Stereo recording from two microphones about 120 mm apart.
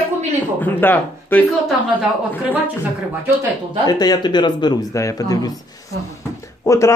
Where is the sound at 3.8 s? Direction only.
35° left (ahead or behind).